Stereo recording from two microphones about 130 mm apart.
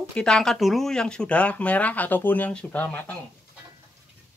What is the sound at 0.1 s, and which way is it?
Speech, 5° left (ahead or behind).